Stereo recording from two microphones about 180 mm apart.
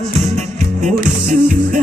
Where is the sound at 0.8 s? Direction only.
45° right (ahead or behind).